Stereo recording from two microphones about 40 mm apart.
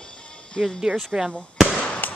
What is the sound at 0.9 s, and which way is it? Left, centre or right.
Speech, right.